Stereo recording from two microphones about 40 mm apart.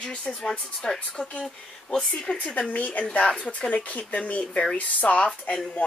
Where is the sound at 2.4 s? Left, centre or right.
Left.